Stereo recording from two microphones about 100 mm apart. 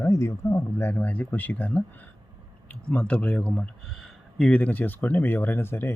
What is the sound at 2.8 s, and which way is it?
A man's voice, 10° left (ahead or behind).